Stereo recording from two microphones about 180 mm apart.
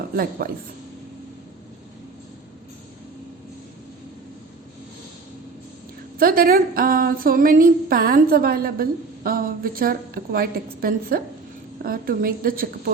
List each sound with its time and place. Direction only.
0.2 s a woman's voice: 55° right (ahead or behind)
6.1 s a woman's voice: 55° right (ahead or behind)